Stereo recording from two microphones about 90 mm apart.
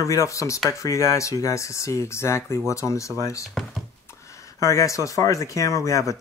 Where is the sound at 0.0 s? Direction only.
35° left (ahead or behind).